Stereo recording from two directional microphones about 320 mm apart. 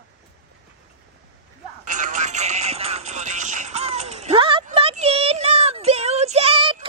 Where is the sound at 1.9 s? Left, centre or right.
Right.